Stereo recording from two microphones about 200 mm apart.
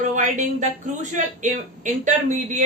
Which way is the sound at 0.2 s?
35° right (ahead or behind).